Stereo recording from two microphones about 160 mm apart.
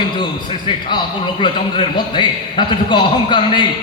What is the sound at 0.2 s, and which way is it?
A man's voice, 30° left (ahead or behind).